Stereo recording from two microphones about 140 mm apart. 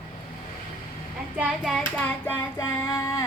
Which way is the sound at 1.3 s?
10° right (ahead or behind).